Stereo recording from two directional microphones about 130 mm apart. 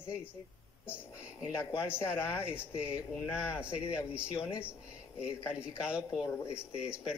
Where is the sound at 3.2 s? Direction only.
20° left (ahead or behind).